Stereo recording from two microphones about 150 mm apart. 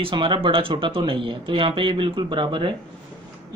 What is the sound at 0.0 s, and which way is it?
Speech, 35° right (ahead or behind).